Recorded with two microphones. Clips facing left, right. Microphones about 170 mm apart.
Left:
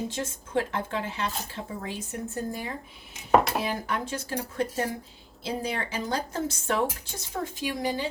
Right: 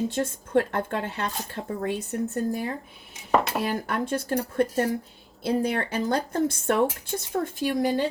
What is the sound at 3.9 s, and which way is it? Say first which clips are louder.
Speech: right 5 dB; 50° right (ahead or behind).